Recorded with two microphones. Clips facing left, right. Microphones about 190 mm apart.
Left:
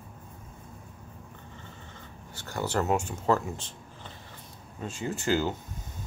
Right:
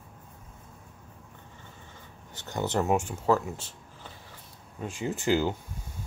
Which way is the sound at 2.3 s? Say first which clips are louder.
Right 1 dB; 20° right (ahead or behind).